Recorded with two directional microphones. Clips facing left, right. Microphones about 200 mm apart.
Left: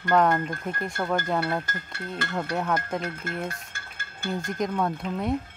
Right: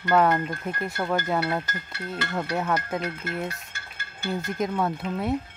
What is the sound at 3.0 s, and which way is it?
Speech, 50° left (ahead or behind).